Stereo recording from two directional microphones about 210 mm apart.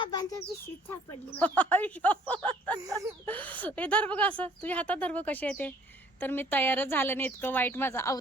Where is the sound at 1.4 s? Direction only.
5° left (ahead or behind).